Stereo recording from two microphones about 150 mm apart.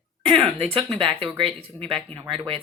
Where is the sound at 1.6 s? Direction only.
5° left (ahead or behind).